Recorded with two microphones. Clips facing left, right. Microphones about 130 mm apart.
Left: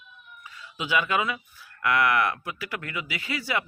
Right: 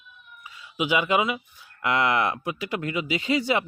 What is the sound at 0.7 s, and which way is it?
Speech, 15° right (ahead or behind).